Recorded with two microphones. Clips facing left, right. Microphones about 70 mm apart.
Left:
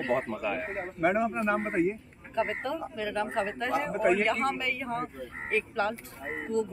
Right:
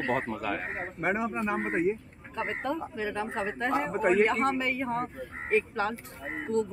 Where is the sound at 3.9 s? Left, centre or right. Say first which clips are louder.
Right 2 dB; right.